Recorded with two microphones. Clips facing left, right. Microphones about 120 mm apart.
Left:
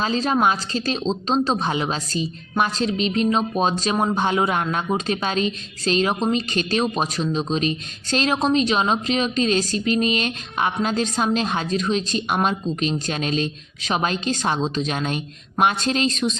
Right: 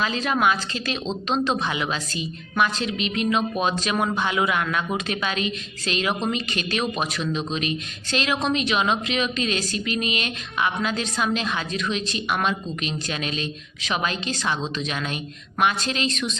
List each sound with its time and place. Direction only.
0.0 s a woman's voice: 35° left (ahead or behind)